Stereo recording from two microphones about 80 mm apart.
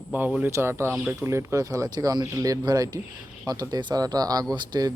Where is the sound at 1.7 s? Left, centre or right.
Right.